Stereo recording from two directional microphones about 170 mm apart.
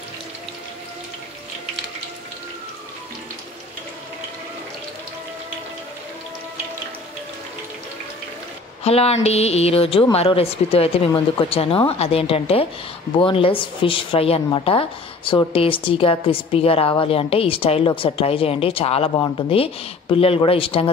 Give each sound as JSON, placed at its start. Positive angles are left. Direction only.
{"t": 8.8, "sound": "a woman's voice", "side_deg": 35}